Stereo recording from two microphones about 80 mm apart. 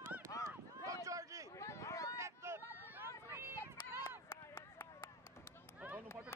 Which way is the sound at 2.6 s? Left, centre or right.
Left.